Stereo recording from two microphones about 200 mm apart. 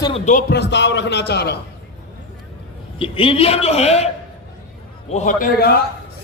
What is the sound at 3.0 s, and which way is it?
A man's voice, 25° left (ahead or behind).